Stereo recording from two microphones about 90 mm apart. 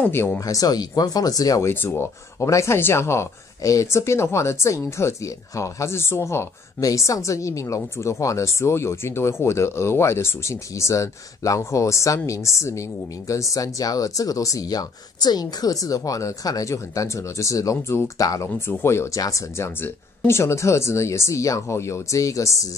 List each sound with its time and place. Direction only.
0.0 s speech: 20° left (ahead or behind)
0.4 s speech: 40° left (ahead or behind)
1.7 s speech: 25° left (ahead or behind)
18.5 s speech: 25° left (ahead or behind)